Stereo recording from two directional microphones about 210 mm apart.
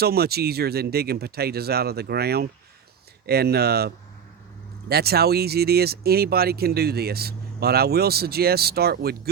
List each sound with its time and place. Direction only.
0.0 s speech: 50° right (ahead or behind)